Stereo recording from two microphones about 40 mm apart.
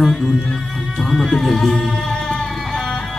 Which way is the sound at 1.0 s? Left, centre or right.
Centre.